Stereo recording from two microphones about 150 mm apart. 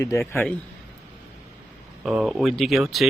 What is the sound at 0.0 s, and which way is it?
Speech, 20° left (ahead or behind).